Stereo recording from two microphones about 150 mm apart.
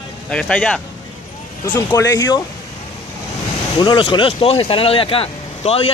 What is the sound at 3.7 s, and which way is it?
Speech, 30° left (ahead or behind).